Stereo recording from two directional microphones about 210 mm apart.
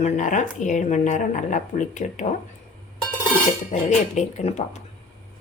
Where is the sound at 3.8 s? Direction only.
35° left (ahead or behind).